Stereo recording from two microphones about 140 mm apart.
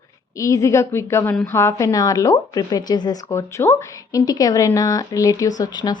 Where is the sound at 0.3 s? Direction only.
25° left (ahead or behind).